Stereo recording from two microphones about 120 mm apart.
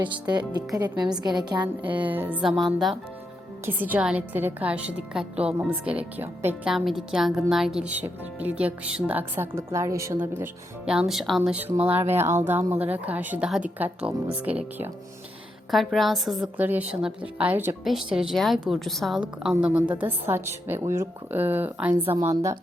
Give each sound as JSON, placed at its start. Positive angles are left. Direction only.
{"t": 0.0, "sound": "speech", "side_deg": -40}
{"t": 2.0, "sound": "a woman's voice", "side_deg": -15}
{"t": 2.4, "sound": "speech", "side_deg": 0}
{"t": 3.7, "sound": "a woman's voice", "side_deg": -15}
{"t": 6.7, "sound": "a woman's voice", "side_deg": 0}
{"t": 10.8, "sound": "speech", "side_deg": -5}
{"t": 11.5, "sound": "a woman's voice", "side_deg": -15}
{"t": 15.7, "sound": "speech", "side_deg": 0}
{"t": 16.6, "sound": "a woman's voice", "side_deg": -15}
{"t": 17.8, "sound": "a woman's voice", "side_deg": -5}